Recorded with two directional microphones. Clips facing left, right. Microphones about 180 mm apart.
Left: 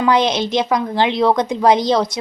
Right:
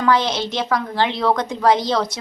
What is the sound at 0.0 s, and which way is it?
A woman's voice, 15° left (ahead or behind).